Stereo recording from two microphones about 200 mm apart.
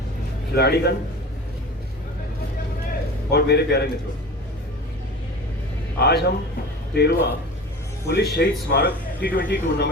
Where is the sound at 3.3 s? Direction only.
55° left (ahead or behind).